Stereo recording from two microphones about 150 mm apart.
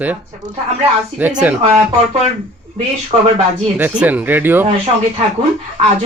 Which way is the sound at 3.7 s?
10° right (ahead or behind).